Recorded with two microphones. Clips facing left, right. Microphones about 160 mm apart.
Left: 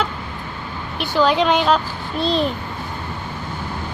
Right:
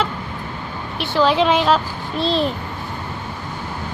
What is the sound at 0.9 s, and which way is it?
A child's voice, centre (ahead or behind).